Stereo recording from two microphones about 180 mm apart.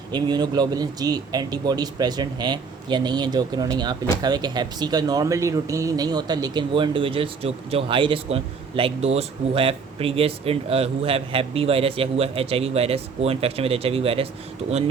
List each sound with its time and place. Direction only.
0.1 s speech: 25° right (ahead or behind)